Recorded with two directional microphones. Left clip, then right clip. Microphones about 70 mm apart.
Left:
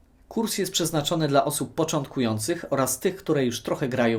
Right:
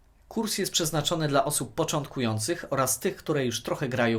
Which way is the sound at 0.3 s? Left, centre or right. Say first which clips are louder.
Left 2 dB; right.